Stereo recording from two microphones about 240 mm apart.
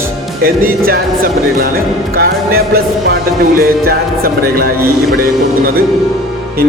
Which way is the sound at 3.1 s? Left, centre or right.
Right.